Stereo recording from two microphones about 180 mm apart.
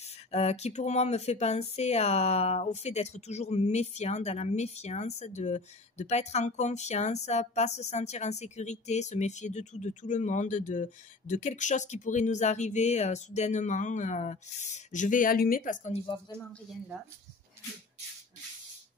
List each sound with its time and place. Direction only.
0.3 s speech: 35° left (ahead or behind)